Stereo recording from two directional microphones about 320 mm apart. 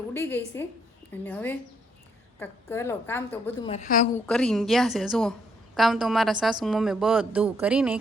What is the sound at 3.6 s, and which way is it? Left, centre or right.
Speech, left.